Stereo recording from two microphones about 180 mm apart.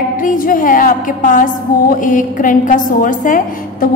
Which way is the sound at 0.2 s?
50° left (ahead or behind).